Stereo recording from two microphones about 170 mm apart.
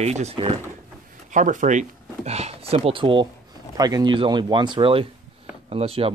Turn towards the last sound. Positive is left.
turn(degrees=-35)  # may be behind; listen again after turning